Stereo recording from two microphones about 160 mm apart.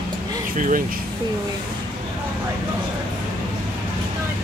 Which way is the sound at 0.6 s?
55° right (ahead or behind).